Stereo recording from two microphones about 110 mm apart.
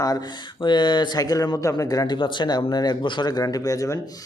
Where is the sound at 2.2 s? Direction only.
45° left (ahead or behind).